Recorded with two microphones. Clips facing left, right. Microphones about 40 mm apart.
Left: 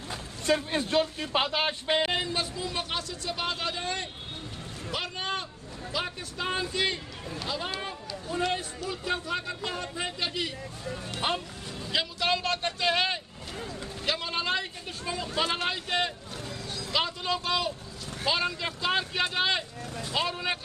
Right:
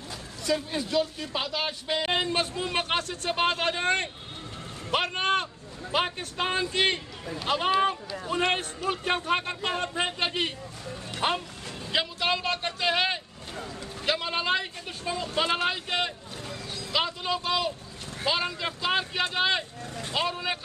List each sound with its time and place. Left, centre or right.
0.1 s speech: left
2.1 s a man's voice: right
11.2 s a man's voice: centre
19.8 s speech: right
20.2 s speech: centre